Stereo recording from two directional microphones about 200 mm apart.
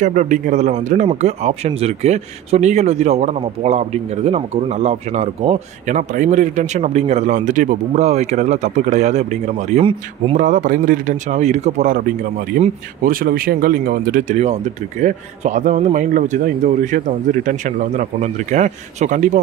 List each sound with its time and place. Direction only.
0.0 s a man's voice: 40° right (ahead or behind)